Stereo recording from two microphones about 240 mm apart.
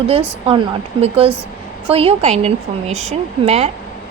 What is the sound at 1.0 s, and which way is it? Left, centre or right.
A woman's voice, right.